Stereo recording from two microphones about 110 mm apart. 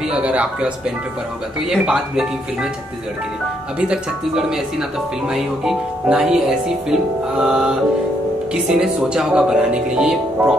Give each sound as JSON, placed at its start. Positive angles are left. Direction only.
{"t": 0.1, "sound": "speech", "side_deg": -10}
{"t": 1.7, "sound": "speech", "side_deg": -5}
{"t": 3.8, "sound": "speech", "side_deg": -5}
{"t": 8.7, "sound": "speech", "side_deg": -5}